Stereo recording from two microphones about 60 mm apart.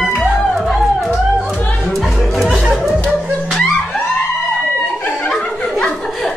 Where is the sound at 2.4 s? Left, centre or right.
Centre.